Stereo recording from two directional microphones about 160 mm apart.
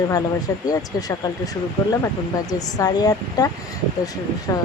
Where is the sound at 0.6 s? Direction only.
20° left (ahead or behind).